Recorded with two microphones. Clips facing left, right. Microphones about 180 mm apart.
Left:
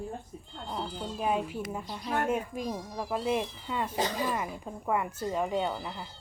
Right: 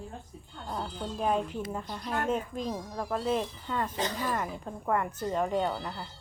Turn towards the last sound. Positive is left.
turn(degrees=5)  # may be behind; listen again after turning